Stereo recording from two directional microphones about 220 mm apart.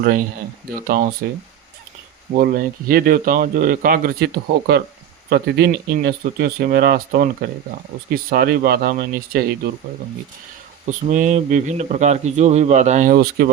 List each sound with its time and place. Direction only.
0.0 s speech: 40° right (ahead or behind)
2.3 s speech: 40° right (ahead or behind)
8.3 s speech: 45° right (ahead or behind)
11.1 s speech: 35° right (ahead or behind)